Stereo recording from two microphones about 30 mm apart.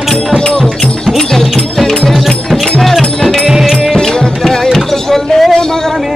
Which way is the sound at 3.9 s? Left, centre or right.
Centre.